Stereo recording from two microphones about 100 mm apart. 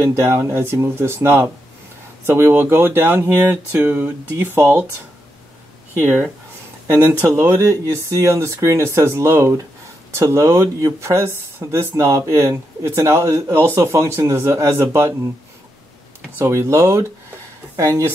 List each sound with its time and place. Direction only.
0.0 s speech: 25° right (ahead or behind)
6.9 s speech: 20° right (ahead or behind)
16.3 s speech: 30° right (ahead or behind)